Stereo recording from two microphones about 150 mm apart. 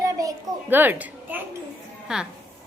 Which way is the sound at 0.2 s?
20° right (ahead or behind).